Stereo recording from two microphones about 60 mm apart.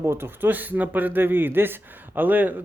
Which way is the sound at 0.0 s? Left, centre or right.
Right.